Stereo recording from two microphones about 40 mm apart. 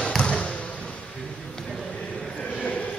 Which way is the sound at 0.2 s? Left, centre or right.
Left.